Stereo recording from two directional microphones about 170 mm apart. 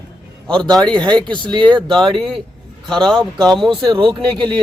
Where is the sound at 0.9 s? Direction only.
25° right (ahead or behind).